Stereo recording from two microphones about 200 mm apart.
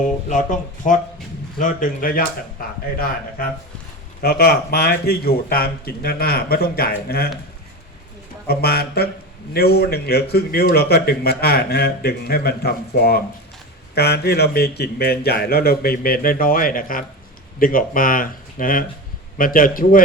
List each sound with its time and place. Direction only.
0.3 s a man's voice: 40° left (ahead or behind)
8.4 s a man's voice: 50° left (ahead or behind)